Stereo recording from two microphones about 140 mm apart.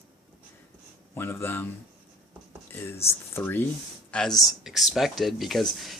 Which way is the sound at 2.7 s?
15° left (ahead or behind).